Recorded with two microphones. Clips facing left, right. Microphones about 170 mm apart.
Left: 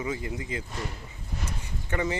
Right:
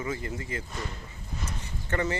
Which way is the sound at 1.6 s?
10° left (ahead or behind).